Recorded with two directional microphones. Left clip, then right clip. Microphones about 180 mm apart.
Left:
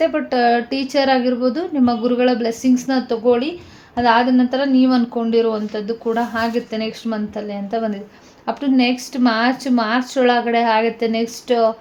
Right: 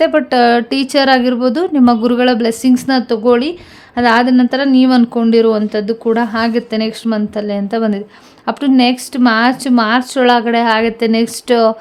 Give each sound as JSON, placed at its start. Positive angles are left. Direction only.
{"t": 0.0, "sound": "a woman's voice", "side_deg": -50}